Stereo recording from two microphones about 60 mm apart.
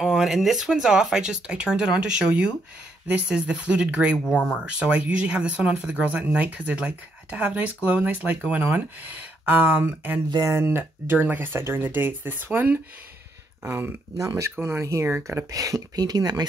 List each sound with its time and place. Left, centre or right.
0.0 s speech: centre; by 10.2 s right
10.4 s speech: right
10.8 s speech: right
14.1 s speech: right
15.5 s speech: right